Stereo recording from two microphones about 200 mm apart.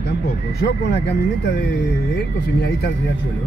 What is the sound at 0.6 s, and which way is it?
Speech, 60° left (ahead or behind).